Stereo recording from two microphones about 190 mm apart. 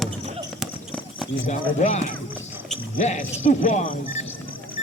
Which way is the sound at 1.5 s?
35° left (ahead or behind).